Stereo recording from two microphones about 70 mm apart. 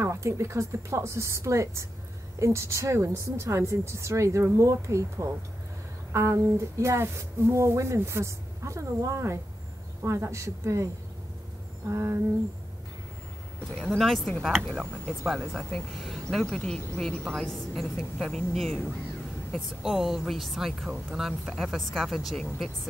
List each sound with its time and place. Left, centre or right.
0.0 s speech: right
11.9 s a sound: right
13.9 s speech: centre
15.7 s speech: centre
19.8 s speech: centre